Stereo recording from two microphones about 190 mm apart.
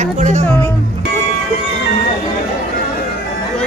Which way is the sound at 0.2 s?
40° right (ahead or behind).